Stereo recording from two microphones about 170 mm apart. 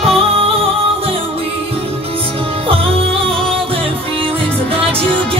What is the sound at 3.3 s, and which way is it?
Music, 5° left (ahead or behind).